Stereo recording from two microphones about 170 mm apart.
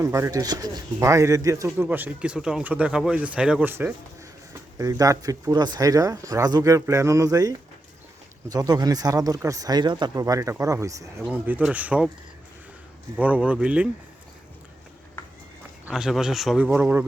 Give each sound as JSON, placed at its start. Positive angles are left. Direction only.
{"t": 0.0, "sound": "speech", "side_deg": -15}
{"t": 8.5, "sound": "speech", "side_deg": -20}
{"t": 13.1, "sound": "speech", "side_deg": -10}
{"t": 15.9, "sound": "speech", "side_deg": -5}